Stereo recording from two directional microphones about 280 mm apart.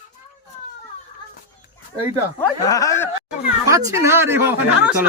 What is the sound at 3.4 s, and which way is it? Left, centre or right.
Speech, centre.